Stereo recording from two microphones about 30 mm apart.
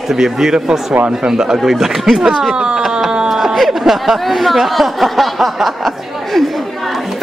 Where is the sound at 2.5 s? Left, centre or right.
Right.